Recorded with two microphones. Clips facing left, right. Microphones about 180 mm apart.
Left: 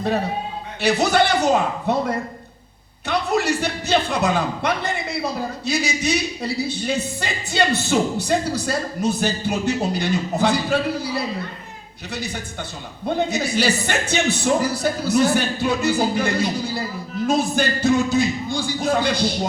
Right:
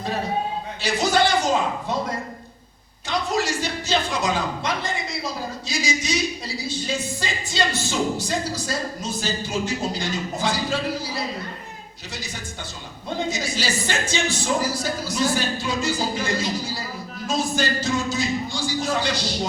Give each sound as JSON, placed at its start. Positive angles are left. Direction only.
{"t": 0.8, "sound": "speech", "side_deg": 65}
{"t": 3.1, "sound": "speech", "side_deg": 60}